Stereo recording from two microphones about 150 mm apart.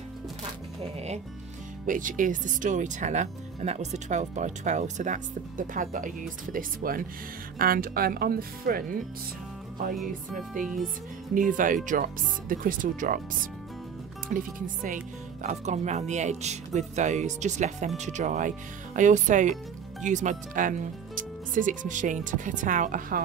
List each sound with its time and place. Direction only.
0.9 s music: 45° right (ahead or behind)
1.9 s speech: 65° right (ahead or behind)
10.6 s speech: 60° right (ahead or behind)
14.3 s speech: 60° right (ahead or behind)
15.4 s speech: 50° right (ahead or behind); by 23.2 s 65° right (ahead or behind)